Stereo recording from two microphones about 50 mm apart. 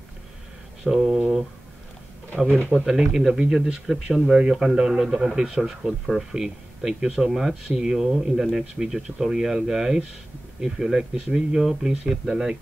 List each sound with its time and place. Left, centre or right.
0.8 s speech: centre
2.3 s speech: right
2.7 s speech: centre
3.8 s speech: centre
4.3 s speech: centre